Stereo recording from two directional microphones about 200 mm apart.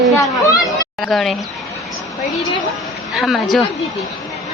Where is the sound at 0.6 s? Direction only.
Centre (ahead or behind).